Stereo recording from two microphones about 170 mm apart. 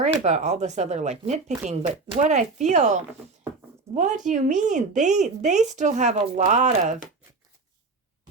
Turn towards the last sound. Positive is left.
turn(degrees=-45)  # may be behind; listen again after turning